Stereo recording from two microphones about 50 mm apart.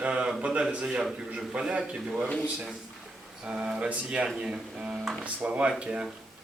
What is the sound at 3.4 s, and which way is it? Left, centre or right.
Speech, centre.